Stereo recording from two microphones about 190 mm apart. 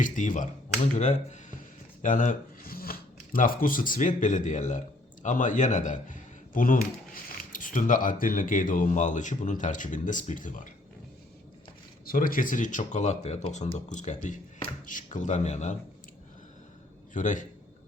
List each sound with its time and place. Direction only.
0.0 s speech: 45° left (ahead or behind)
12.0 s speech: 45° left (ahead or behind)
17.2 s speech: 40° left (ahead or behind)